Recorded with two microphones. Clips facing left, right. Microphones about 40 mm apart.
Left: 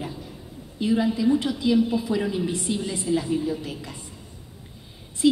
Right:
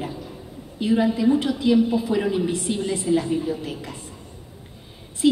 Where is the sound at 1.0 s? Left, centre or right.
Right.